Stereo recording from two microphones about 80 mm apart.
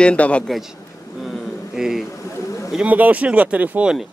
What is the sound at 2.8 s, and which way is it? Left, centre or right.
Speech, centre.